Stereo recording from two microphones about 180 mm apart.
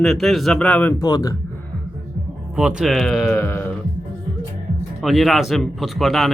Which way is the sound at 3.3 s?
15° left (ahead or behind).